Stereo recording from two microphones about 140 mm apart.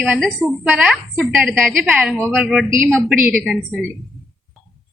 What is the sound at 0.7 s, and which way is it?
A woman's voice, centre (ahead or behind).